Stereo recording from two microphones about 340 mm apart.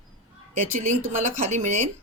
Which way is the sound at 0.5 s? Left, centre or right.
Centre.